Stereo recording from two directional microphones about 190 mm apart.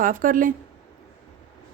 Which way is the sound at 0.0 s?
45° right (ahead or behind).